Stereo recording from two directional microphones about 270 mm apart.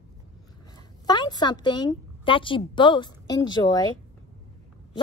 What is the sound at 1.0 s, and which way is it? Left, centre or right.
A woman's voice, centre.